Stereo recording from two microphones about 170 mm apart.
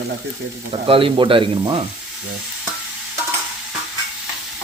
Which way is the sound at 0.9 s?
30° right (ahead or behind).